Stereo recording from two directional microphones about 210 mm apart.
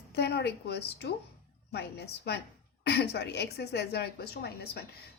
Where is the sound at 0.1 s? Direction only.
50° left (ahead or behind).